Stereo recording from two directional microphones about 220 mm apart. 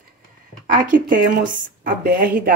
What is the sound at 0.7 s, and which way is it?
A woman's voice, 35° right (ahead or behind).